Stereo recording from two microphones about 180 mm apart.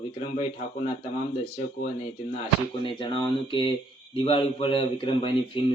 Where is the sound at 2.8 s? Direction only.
30° left (ahead or behind).